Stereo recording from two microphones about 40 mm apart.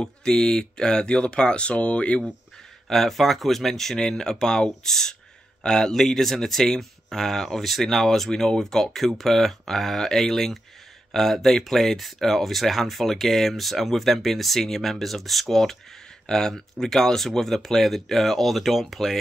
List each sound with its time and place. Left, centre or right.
0.3 s speech: centre
2.9 s speech: centre